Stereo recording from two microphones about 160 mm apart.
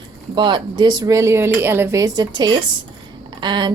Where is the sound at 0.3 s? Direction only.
30° right (ahead or behind).